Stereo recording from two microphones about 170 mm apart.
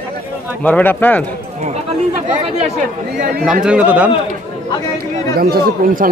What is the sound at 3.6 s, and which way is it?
Speech, 5° right (ahead or behind).